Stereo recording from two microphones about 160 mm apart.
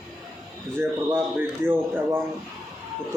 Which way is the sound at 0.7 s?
15° right (ahead or behind).